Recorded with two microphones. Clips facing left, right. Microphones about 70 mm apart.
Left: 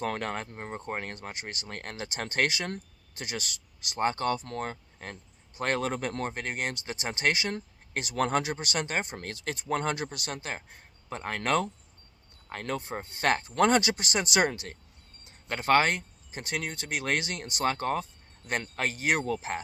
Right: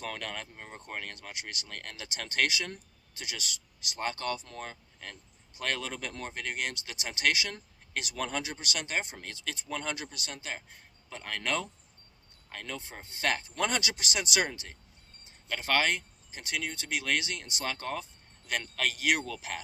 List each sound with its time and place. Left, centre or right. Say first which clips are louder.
0.0 s speech: left 6 dB; left